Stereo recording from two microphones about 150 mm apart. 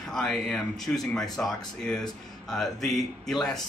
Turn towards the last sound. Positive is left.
turn(degrees=0)  # may be behind; listen again after turning